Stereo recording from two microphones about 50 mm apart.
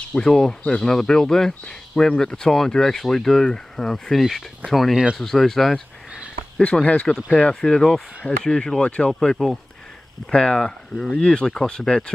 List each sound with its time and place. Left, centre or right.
0.1 s speech: centre
6.8 s speech: left